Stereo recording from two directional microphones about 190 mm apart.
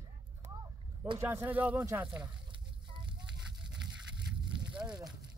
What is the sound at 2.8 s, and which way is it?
Fire, 25° right (ahead or behind).